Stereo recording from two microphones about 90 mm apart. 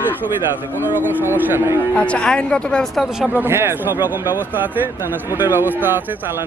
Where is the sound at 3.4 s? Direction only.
30° right (ahead or behind).